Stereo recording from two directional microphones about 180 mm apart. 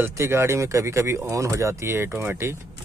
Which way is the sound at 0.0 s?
15° right (ahead or behind).